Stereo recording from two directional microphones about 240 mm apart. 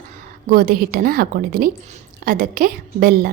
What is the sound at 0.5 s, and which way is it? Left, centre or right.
A woman's voice, right.